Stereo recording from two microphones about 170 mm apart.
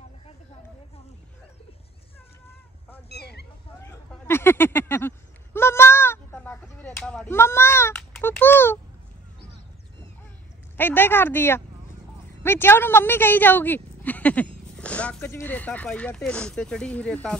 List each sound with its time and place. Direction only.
3.1 s cat: 75° left (ahead or behind)
4.1 s a sound: 15° left (ahead or behind)
10.8 s speech: 10° left (ahead or behind)